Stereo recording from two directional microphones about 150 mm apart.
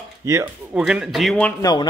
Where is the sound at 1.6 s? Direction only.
25° left (ahead or behind).